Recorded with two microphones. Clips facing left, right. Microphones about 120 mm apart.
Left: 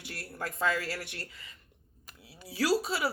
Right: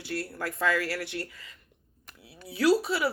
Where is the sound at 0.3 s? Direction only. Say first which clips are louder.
Right 2 dB; 25° left (ahead or behind).